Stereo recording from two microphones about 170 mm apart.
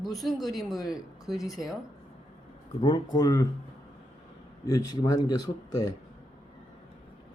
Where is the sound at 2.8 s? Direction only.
25° left (ahead or behind).